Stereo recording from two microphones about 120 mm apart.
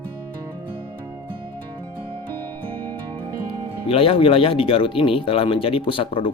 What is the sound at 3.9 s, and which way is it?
Speech, 50° left (ahead or behind).